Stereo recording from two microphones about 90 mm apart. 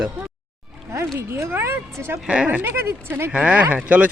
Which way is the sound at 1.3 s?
25° right (ahead or behind).